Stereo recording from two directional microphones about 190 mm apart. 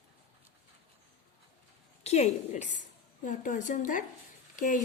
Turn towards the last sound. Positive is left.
turn(degrees=45)  # may be behind; listen again after turning